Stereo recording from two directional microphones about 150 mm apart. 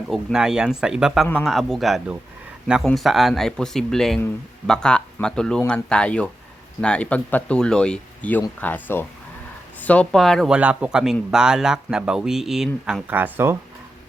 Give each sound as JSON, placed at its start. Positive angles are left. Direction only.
{"t": 0.1, "sound": "speech", "side_deg": 0}